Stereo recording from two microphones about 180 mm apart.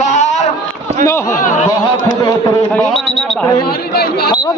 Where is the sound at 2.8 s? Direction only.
5° left (ahead or behind).